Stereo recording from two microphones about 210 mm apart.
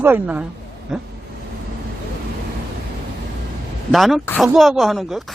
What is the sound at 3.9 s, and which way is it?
A man's voice, centre (ahead or behind).